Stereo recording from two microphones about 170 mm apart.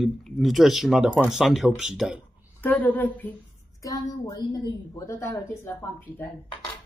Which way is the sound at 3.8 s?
20° left (ahead or behind).